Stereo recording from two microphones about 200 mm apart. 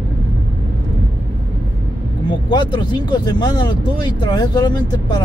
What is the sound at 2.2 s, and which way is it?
Speech, 20° left (ahead or behind).